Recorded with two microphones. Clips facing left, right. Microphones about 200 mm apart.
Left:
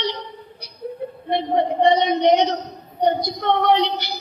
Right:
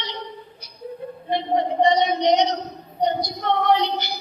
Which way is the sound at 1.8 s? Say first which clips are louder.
Left 3 dB; 55° left (ahead or behind).